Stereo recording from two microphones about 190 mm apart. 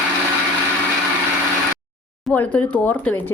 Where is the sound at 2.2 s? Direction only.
5° left (ahead or behind).